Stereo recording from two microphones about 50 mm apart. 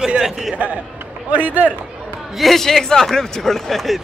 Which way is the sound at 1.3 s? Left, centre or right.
Right.